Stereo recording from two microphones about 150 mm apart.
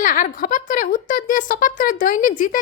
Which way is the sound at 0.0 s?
65° left (ahead or behind).